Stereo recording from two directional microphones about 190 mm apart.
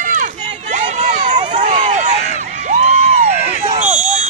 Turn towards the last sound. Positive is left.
turn(degrees=-35)  # may be behind; listen again after turning